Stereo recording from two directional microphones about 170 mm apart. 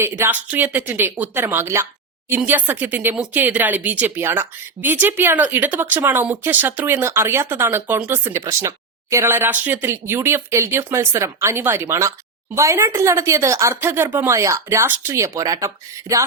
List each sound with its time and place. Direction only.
0.0 s speech: 10° right (ahead or behind)